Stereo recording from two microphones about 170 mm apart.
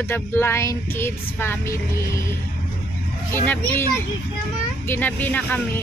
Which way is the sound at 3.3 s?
10° left (ahead or behind).